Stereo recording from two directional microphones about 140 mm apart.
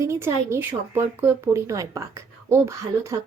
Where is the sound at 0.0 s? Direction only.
20° right (ahead or behind).